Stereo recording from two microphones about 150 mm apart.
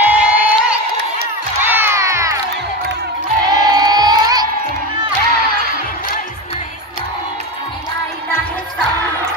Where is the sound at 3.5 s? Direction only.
25° right (ahead or behind).